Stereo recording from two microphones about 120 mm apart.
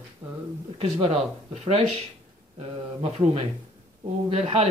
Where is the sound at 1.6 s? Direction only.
65° right (ahead or behind).